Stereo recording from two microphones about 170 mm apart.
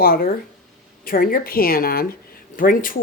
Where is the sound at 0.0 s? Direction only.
60° left (ahead or behind).